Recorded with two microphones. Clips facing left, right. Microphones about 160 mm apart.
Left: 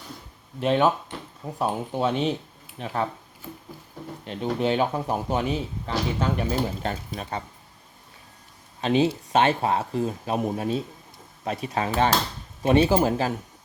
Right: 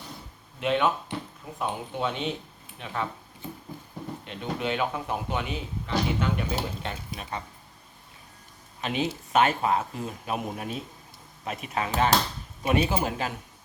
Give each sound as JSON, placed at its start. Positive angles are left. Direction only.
{"t": 0.6, "sound": "speech", "side_deg": 35}
{"t": 4.3, "sound": "speech", "side_deg": 35}
{"t": 8.8, "sound": "speech", "side_deg": 30}